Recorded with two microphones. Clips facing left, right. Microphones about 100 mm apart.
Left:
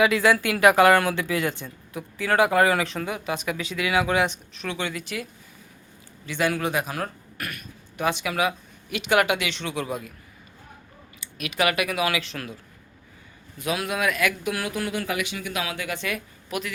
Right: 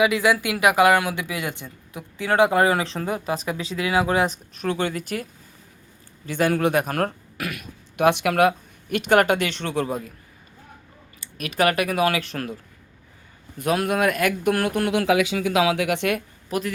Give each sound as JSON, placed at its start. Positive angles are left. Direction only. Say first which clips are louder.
{"t": 0.0, "sound": "speech", "louder": "even", "side_deg": -15}
{"t": 6.2, "sound": "speech", "louder": "right 4 dB", "side_deg": -45}
{"t": 11.2, "sound": "speech", "louder": "right 3 dB", "side_deg": -40}
{"t": 13.6, "sound": "speech", "louder": "right 5 dB", "side_deg": -50}
{"t": 16.5, "sound": "speech", "louder": "right 5 dB", "side_deg": -40}